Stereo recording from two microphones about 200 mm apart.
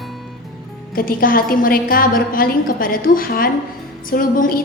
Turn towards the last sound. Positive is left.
turn(degrees=45)  # may be behind; listen again after turning